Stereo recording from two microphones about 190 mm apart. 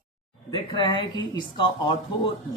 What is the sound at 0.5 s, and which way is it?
Speech, 25° left (ahead or behind).